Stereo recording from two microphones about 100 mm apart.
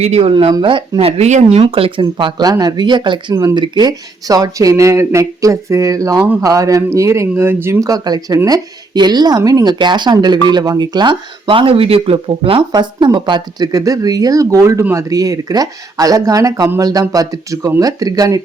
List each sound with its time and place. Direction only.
0.0 s speech: 85° right; by 0.9 s 55° right (ahead or behind)
0.9 s speech: 90° right
1.5 s speech: 70° right (ahead or behind); by 3.3 s 50° right (ahead or behind)
3.3 s speech: 40° right (ahead or behind); by 12.6 s 65° right (ahead or behind)
12.7 s speech: 45° right (ahead or behind)